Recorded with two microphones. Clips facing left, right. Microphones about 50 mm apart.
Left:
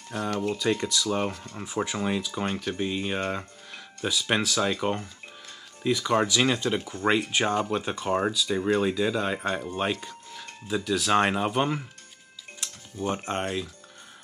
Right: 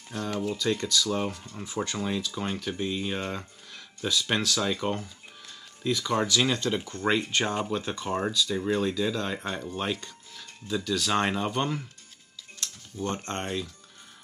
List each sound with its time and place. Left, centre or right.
0.1 s speech: centre
0.6 s speech: centre